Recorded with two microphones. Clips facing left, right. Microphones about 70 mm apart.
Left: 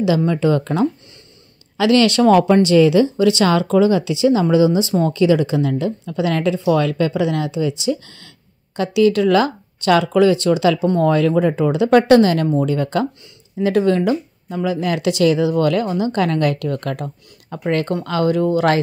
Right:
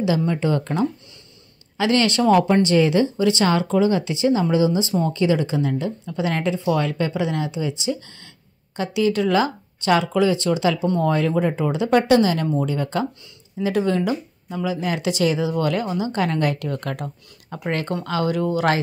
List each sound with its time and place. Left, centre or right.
0.3 s speech: left